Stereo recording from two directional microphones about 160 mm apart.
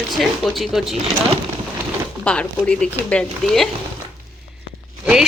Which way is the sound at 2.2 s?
10° left (ahead or behind).